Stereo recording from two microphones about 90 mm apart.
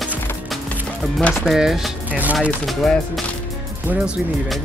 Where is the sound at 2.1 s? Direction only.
15° right (ahead or behind).